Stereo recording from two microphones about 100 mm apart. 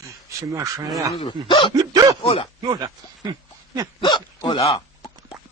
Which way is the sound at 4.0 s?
45° left (ahead or behind).